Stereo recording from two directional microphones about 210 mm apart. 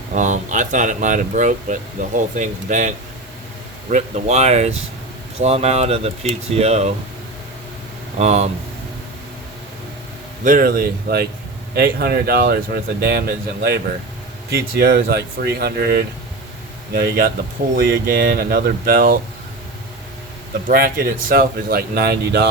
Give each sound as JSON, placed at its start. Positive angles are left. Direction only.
{"t": 0.1, "sound": "speech", "side_deg": -35}
{"t": 8.2, "sound": "speech", "side_deg": -30}
{"t": 10.4, "sound": "speech", "side_deg": -40}
{"t": 20.5, "sound": "speech", "side_deg": -45}